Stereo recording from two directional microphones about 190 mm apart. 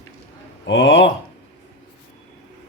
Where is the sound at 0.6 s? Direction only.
70° left (ahead or behind).